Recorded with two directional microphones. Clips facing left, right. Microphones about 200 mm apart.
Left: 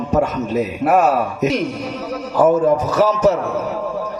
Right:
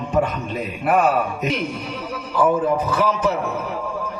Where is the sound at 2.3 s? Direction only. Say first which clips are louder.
Left 5 dB; 45° left (ahead or behind).